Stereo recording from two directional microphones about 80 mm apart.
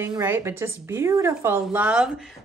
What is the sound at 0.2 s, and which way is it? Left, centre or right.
Speech, right.